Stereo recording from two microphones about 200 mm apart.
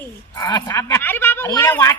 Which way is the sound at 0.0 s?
20° left (ahead or behind).